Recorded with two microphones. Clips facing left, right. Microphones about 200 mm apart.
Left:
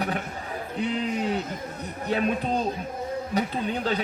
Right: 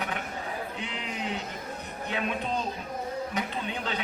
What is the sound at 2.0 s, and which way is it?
A man's voice, 35° left (ahead or behind).